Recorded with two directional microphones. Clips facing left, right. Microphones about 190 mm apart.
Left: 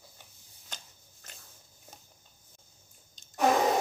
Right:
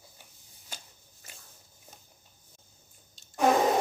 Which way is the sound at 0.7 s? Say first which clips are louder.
Right 1 dB; 10° right (ahead or behind).